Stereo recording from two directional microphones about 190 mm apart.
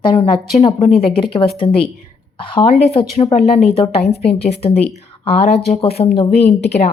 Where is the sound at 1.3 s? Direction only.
25° left (ahead or behind).